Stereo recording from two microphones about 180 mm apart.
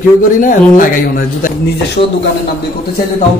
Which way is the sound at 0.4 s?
50° left (ahead or behind).